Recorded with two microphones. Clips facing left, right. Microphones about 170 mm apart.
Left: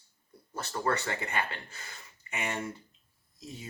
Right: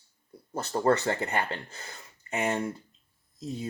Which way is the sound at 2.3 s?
40° right (ahead or behind).